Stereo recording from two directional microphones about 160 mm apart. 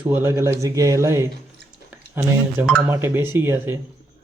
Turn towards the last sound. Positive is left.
turn(degrees=-15)  # may be behind; listen again after turning